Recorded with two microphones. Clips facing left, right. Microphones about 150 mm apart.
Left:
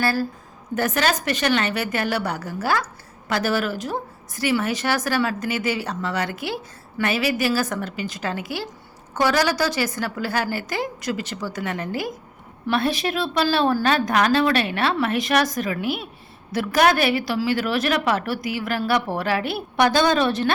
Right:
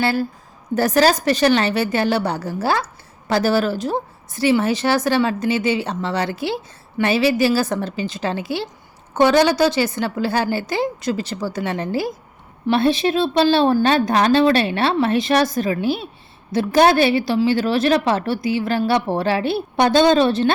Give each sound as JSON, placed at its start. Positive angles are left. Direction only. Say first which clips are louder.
{"t": 0.0, "sound": "a woman's voice", "louder": "right 3 dB", "side_deg": -25}
{"t": 0.8, "sound": "a woman's voice", "louder": "right 6 dB", "side_deg": -35}